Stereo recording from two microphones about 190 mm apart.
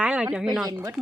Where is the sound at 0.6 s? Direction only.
15° right (ahead or behind).